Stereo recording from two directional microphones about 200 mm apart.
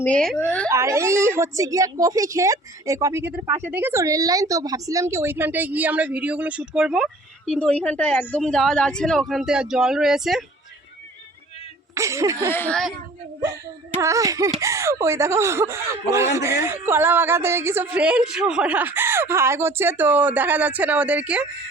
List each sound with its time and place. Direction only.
0.0 s speech: 5° left (ahead or behind)
0.7 s a woman's voice: 15° right (ahead or behind)
11.9 s a woman's voice: 15° right (ahead or behind)
12.5 s speech: 10° left (ahead or behind)
14.0 s a woman's voice: 15° right (ahead or behind)